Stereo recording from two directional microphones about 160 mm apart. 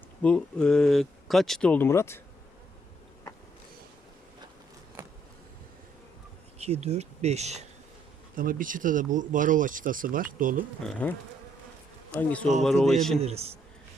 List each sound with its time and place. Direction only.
0.2 s speech: 5° left (ahead or behind)
6.6 s speech: 40° right (ahead or behind)
8.4 s speech: 60° right (ahead or behind)
10.8 s speech: 5° left (ahead or behind)
12.1 s speech: 10° left (ahead or behind)
13.1 s a man's voice: 40° right (ahead or behind)